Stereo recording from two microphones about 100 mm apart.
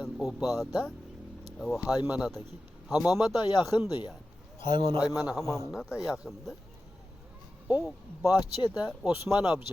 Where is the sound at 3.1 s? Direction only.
40° left (ahead or behind).